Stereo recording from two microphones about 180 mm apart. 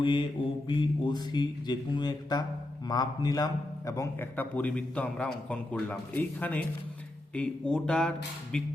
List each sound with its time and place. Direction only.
0.0 s a man's voice: 25° left (ahead or behind); by 8.7 s 5° left (ahead or behind)